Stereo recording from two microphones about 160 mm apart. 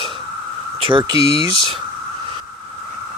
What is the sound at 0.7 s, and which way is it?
Speech, 30° right (ahead or behind).